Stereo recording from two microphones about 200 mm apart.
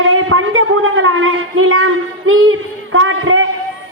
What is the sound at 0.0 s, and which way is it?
A woman's voice, 90° right.